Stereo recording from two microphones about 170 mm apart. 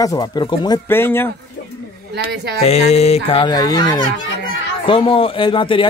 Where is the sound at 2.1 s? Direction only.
90° right.